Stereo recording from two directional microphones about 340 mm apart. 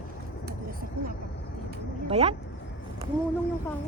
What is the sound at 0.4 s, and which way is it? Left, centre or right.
Vehicle, right.